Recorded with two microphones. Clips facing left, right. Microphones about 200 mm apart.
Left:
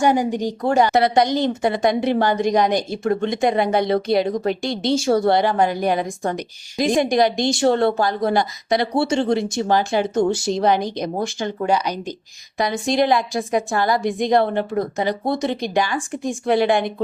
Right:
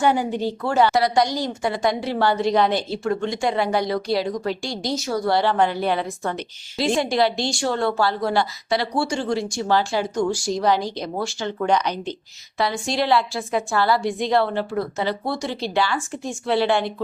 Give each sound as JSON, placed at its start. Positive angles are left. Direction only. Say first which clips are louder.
{"t": 0.3, "sound": "a woman's voice", "louder": "left 3 dB", "side_deg": 15}